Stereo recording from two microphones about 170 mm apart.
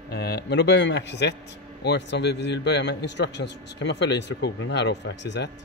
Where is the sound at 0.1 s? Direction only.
75° left (ahead or behind).